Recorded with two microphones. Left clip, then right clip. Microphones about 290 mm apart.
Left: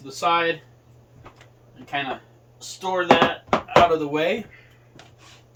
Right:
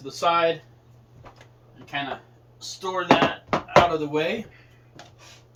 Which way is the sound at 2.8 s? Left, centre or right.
Left.